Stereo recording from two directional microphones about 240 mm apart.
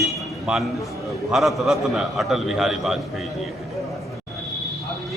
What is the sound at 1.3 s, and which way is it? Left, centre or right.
A man's voice, centre.